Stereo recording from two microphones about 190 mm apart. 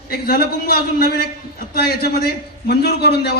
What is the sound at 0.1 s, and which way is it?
A man's voice, 55° left (ahead or behind).